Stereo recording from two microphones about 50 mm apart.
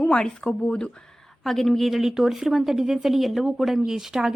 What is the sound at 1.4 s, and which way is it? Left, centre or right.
Speech, centre.